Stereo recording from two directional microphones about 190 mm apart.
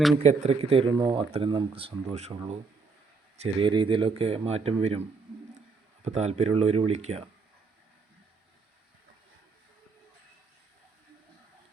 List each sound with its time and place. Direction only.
0.2 s speech: 35° right (ahead or behind)